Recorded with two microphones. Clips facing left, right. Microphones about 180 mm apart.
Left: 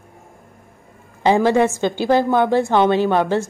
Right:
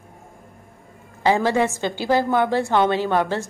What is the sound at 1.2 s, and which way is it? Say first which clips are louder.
A woman's voice: left 4 dB; 20° left (ahead or behind).